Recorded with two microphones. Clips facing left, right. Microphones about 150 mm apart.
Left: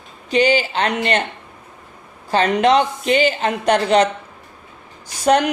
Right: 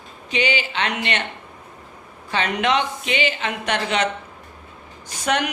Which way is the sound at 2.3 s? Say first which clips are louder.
Left 6 dB; 40° left (ahead or behind).